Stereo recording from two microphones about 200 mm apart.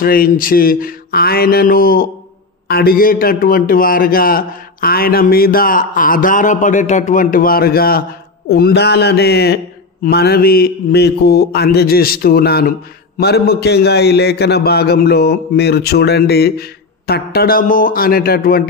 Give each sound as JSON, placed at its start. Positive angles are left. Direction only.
{"t": 0.0, "sound": "a man's voice", "side_deg": 45}